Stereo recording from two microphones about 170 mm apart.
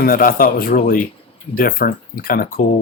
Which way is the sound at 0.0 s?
60° left (ahead or behind).